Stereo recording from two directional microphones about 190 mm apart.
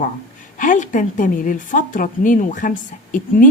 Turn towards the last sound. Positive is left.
turn(degrees=45)  # may be behind; listen again after turning